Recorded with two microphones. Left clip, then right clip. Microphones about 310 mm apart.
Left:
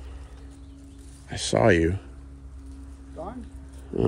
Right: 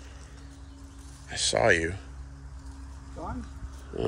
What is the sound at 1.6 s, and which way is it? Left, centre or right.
Mantra, left.